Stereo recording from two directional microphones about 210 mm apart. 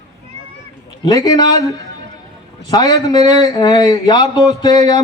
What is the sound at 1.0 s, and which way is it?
A man's voice, 20° left (ahead or behind).